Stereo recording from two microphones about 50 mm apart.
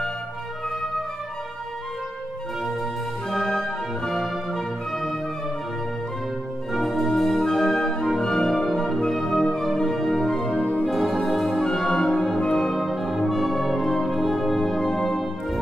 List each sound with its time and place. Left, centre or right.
2.6 s music: centre
6.7 s music: centre
10.5 s music: left
10.9 s music: centre
12.4 s brass instrument: centre